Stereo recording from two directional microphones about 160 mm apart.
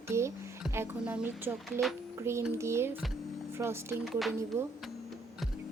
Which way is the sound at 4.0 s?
Centre (ahead or behind).